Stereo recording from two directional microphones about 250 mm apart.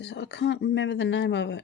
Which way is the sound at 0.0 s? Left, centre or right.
Left.